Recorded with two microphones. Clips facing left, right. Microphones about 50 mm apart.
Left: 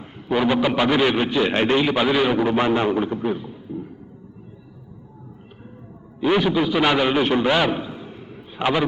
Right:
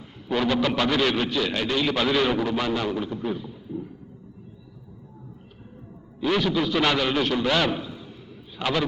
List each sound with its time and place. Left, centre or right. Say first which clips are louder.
0.3 s a man's voice: left 4 dB; centre
1.8 s a man's voice: left 4 dB; centre
2.5 s a man's voice: left 6 dB; left
6.1 s a man's voice: left 4 dB; left